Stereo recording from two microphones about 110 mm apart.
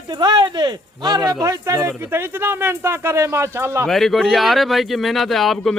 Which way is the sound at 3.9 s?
Centre (ahead or behind).